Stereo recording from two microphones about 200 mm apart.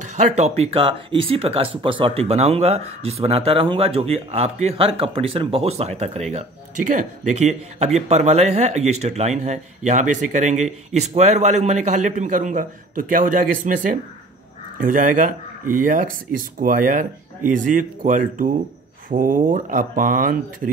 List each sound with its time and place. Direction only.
0.0 s speech: 35° right (ahead or behind)